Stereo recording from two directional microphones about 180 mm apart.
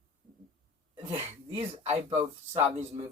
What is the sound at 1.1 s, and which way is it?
Speech, 35° right (ahead or behind).